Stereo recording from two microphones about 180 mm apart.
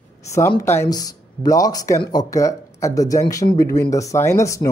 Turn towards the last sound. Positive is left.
turn(degrees=15)  # may be behind; listen again after turning